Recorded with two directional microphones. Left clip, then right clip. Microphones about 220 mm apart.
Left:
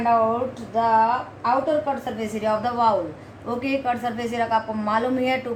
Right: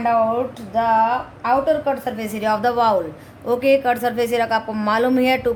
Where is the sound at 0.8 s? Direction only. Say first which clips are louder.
Right 2 dB; 50° right (ahead or behind).